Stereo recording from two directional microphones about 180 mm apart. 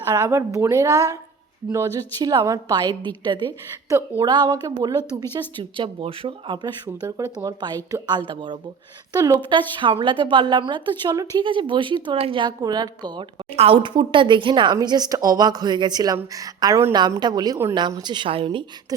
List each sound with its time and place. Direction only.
0.1 s a woman's voice: 15° right (ahead or behind)